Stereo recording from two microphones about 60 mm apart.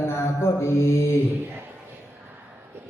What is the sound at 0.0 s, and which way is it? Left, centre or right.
Mantra, left.